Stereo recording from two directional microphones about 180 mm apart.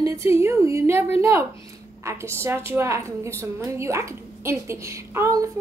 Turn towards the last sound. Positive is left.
turn(degrees=-15)  # may be behind; listen again after turning